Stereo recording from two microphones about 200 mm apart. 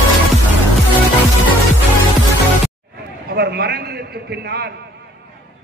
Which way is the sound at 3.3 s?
55° right (ahead or behind).